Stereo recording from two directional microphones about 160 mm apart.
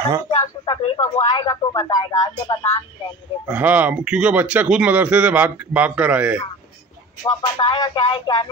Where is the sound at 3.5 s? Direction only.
10° right (ahead or behind).